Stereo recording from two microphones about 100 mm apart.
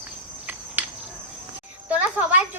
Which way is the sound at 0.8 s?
15° right (ahead or behind).